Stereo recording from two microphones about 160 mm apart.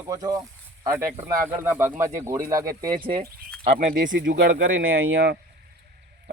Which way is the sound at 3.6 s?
55° right (ahead or behind).